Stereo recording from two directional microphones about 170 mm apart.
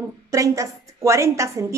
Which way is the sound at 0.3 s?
20° right (ahead or behind).